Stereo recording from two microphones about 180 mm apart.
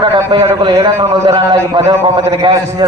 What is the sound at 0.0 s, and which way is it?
A man's voice, 25° right (ahead or behind).